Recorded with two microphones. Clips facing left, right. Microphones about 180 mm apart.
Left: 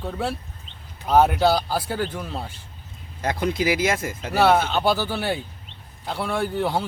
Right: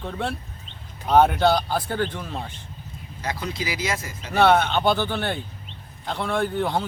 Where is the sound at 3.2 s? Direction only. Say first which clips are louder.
Left 6 dB; 55° left (ahead or behind).